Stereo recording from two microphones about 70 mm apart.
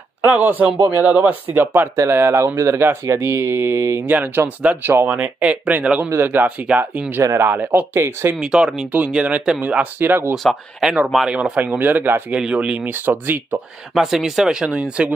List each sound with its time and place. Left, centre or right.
0.2 s speech: right
2.8 s speech: right
5.0 s speech: right
6.0 s speech: right
7.9 s speech: right
8.4 s speech: centre
9.9 s speech: right
10.3 s speech: centre
10.8 s speech: centre
12.4 s speech: centre; by 13.6 s right
13.9 s speech: centre